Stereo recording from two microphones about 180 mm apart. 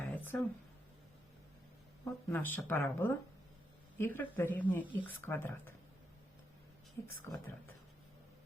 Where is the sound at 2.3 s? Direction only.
10° left (ahead or behind).